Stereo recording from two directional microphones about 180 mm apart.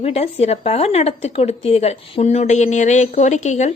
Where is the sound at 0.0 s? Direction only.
35° left (ahead or behind).